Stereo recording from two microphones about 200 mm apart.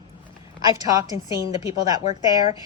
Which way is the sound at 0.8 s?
15° right (ahead or behind).